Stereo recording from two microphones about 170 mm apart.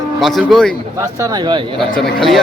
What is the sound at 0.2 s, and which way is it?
Speech, centre (ahead or behind).